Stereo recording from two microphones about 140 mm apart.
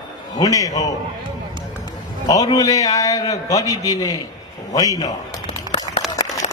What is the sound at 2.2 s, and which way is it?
A man's voice, 25° left (ahead or behind).